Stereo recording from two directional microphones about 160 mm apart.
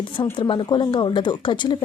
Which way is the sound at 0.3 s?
30° left (ahead or behind).